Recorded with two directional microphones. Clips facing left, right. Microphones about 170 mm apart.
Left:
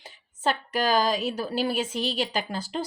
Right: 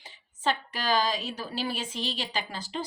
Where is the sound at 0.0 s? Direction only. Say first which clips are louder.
Left 2 dB; 45° left (ahead or behind).